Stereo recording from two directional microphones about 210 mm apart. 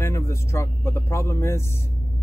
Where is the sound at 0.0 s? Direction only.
15° left (ahead or behind).